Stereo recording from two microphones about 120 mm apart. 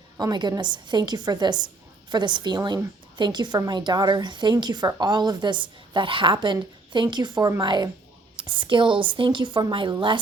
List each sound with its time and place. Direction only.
0.2 s a woman's voice: 35° right (ahead or behind)